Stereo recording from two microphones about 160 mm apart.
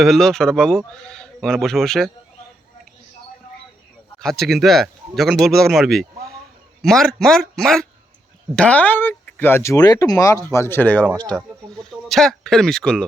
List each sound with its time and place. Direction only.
0.0 s a man's voice: centre (ahead or behind)
4.2 s a man's voice: centre (ahead or behind)